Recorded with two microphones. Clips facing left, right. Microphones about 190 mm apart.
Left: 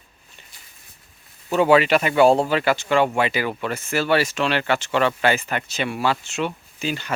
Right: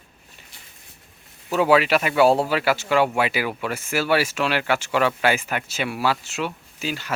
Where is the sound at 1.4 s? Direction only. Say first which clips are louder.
Left 2 dB; 5° right (ahead or behind).